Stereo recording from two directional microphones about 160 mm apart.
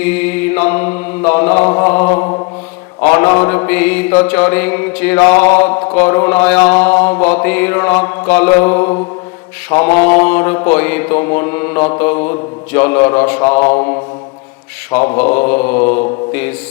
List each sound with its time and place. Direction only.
0.0 s mantra: 10° left (ahead or behind)